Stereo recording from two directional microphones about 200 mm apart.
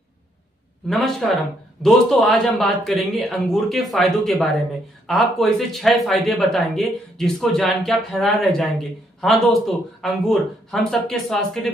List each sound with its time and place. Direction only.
0.8 s speech: centre (ahead or behind)